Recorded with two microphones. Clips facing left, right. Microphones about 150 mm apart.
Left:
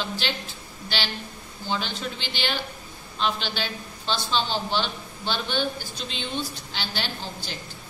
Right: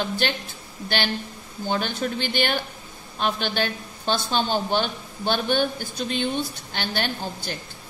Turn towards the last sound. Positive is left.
turn(degrees=-55)  # may be behind; listen again after turning